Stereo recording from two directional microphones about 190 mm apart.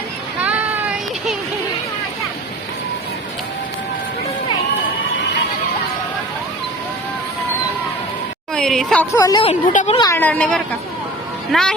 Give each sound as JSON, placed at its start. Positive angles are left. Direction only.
{"t": 0.4, "sound": "a sound", "side_deg": -10}
{"t": 8.5, "sound": "speech", "side_deg": 0}
{"t": 9.1, "sound": "speech", "side_deg": 20}
{"t": 9.5, "sound": "speech", "side_deg": 35}
{"t": 10.0, "sound": "speech", "side_deg": 15}